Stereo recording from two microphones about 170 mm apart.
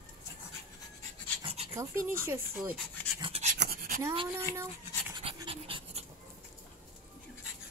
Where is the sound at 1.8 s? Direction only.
15° right (ahead or behind).